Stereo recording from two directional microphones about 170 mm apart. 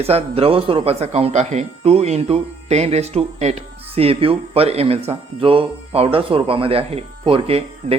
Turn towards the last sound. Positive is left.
turn(degrees=-35)  # may be behind; listen again after turning